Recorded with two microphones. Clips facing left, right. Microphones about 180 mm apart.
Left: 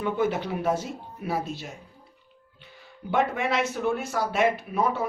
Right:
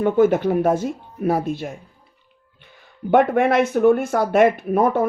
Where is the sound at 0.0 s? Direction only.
50° right (ahead or behind).